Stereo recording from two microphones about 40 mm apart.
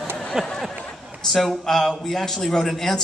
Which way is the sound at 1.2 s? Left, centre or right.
Centre.